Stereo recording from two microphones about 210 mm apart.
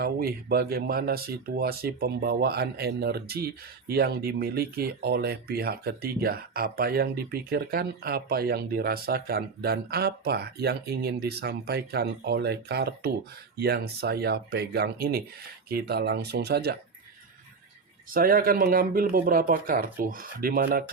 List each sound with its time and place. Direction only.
0.0 s speech: 45° right (ahead or behind)
18.1 s speech: 45° right (ahead or behind)